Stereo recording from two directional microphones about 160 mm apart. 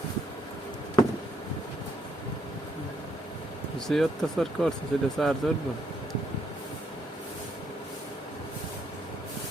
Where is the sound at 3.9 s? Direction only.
Centre (ahead or behind).